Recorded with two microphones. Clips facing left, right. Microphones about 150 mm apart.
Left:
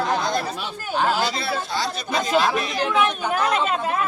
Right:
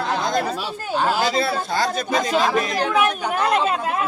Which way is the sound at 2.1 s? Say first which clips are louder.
Even; centre (ahead or behind).